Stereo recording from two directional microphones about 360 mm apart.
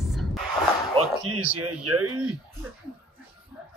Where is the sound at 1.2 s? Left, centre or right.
Right.